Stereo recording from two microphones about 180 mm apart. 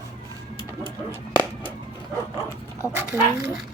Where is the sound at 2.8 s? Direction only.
10° right (ahead or behind).